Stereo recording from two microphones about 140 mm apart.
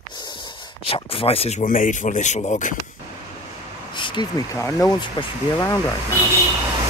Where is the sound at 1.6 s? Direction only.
70° left (ahead or behind).